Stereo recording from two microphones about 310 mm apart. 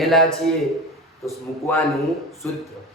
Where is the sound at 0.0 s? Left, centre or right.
Centre.